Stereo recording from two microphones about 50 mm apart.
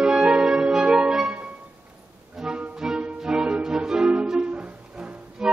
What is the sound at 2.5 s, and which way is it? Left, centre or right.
Music, centre.